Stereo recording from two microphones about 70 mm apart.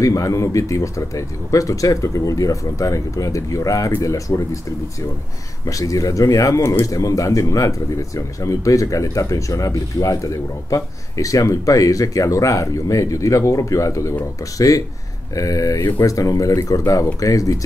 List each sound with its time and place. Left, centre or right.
0.0 s speech: left
5.7 s speech: left
15.3 s speech: left